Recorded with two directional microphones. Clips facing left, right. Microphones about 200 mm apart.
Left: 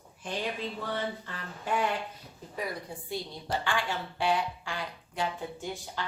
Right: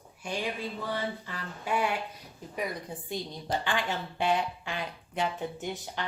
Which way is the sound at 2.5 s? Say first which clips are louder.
Right 1 dB; 20° right (ahead or behind).